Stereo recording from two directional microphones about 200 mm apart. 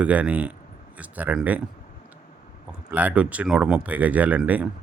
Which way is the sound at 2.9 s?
5° right (ahead or behind).